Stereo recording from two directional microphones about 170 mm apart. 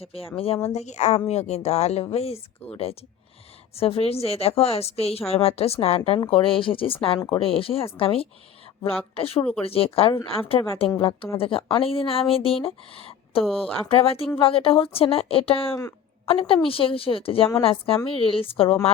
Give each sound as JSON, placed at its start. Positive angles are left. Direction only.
{"t": 0.3, "sound": "speech", "side_deg": 35}
{"t": 3.8, "sound": "speech", "side_deg": 35}